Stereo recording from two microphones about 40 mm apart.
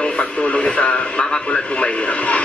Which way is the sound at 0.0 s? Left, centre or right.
Left.